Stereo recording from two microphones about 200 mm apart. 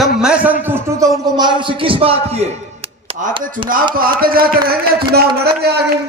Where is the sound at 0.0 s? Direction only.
5° right (ahead or behind).